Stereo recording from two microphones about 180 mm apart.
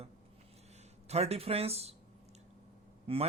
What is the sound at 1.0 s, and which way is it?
Speech, 35° right (ahead or behind).